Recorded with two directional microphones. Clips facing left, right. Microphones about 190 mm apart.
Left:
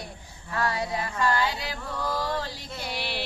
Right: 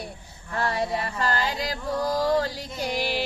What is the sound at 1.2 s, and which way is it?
Music, 40° right (ahead or behind).